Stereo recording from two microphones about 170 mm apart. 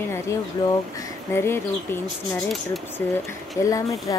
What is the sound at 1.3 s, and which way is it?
Speech, 15° left (ahead or behind).